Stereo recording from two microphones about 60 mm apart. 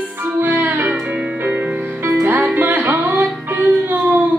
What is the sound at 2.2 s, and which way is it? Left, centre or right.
Music, right.